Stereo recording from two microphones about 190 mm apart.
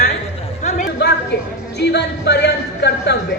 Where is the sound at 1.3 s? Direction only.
60° left (ahead or behind).